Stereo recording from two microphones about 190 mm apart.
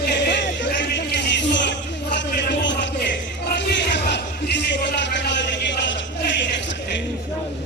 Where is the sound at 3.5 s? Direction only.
65° left (ahead or behind).